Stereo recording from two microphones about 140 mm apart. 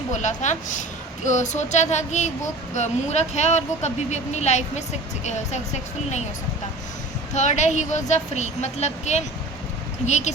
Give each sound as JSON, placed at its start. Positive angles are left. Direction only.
{"t": 0.1, "sound": "a woman's voice", "side_deg": 60}
{"t": 7.3, "sound": "a woman's voice", "side_deg": 55}